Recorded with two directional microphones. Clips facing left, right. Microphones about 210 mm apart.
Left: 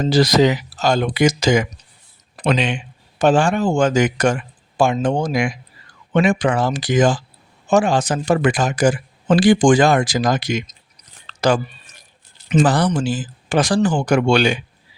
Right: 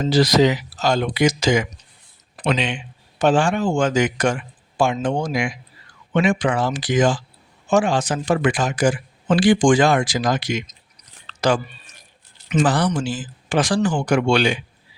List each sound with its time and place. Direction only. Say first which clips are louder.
0.0 s speech: left 1 dB; 45° left (ahead or behind)
11.3 s chewing: left 2 dB; 40° left (ahead or behind)
12.5 s speech: left 3 dB; 35° left (ahead or behind)